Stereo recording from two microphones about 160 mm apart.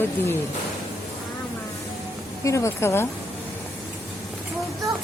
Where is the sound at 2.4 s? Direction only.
20° left (ahead or behind).